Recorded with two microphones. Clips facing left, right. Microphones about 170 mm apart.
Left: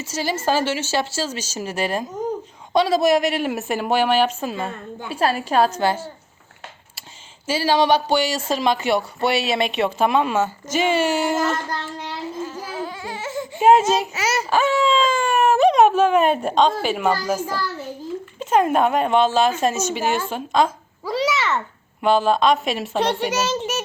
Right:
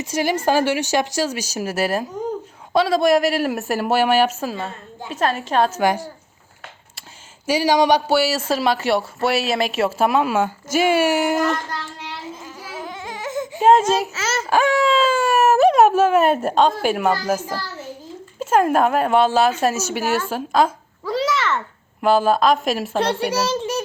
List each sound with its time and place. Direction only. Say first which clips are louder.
0.0 s a woman's voice: right 3 dB; 15° right (ahead or behind)
5.2 s a woman's voice: left 1 dB; 10° left (ahead or behind)
5.7 s speech: right 2 dB; 15° right (ahead or behind)
7.4 s speech: right 2 dB; 15° right (ahead or behind)
12.5 s baby cry: left 3 dB; 15° right (ahead or behind)
13.6 s a child's voice: even; 10° left (ahead or behind)
14.1 s a woman's voice: left 2 dB; 15° left (ahead or behind)
14.5 s a woman's voice: right 2 dB; 10° right (ahead or behind)
21.0 s a sound: right 1 dB; 5° left (ahead or behind)
22.0 s a woman's voice: right 1 dB; 5° right (ahead or behind)